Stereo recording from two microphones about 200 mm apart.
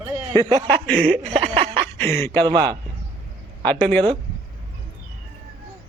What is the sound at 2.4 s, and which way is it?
Speech, 25° right (ahead or behind).